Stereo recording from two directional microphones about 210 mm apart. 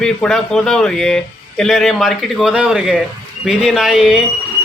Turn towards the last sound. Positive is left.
turn(degrees=0)  # may be behind; listen again after turning